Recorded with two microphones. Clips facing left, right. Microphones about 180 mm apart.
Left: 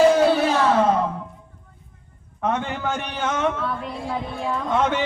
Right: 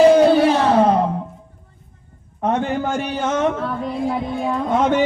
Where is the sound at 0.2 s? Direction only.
20° right (ahead or behind).